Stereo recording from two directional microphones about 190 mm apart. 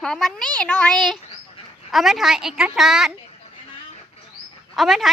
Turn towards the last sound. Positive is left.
turn(degrees=0)  # may be behind; listen again after turning